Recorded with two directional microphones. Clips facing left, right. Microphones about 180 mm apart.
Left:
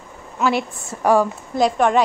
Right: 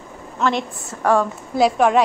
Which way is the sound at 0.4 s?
5° left (ahead or behind).